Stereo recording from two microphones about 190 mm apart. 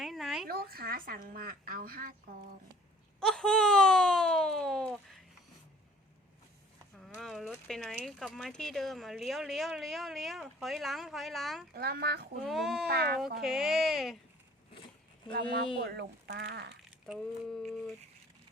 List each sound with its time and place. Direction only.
0.0 s a sound: centre (ahead or behind)
0.4 s a woman's voice: 50° right (ahead or behind)
3.2 s wail: 5° left (ahead or behind)
7.2 s speech: centre (ahead or behind)
11.7 s speech: 55° right (ahead or behind)
12.5 s speech: centre (ahead or behind)
12.9 s speech: 55° right (ahead or behind)
13.4 s speech: centre (ahead or behind)
15.8 s speech: 60° right (ahead or behind)
17.1 s a sound: centre (ahead or behind)